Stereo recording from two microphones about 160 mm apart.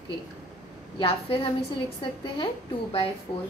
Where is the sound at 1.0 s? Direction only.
35° left (ahead or behind).